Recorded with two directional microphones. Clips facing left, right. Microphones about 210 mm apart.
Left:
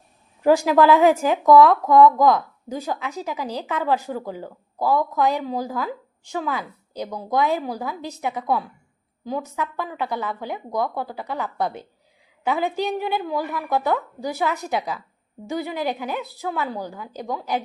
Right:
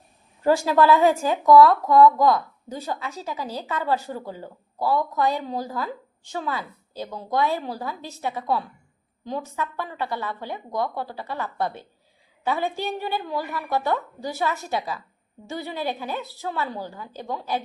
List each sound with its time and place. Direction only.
0.4 s a woman's voice: 15° left (ahead or behind)